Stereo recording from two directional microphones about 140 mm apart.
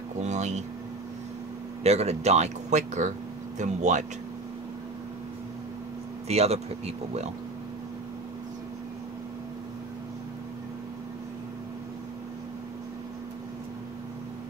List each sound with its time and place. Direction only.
0.2 s a sound: 55° right (ahead or behind)
1.8 s speech: 50° right (ahead or behind)
6.2 s speech: 50° right (ahead or behind)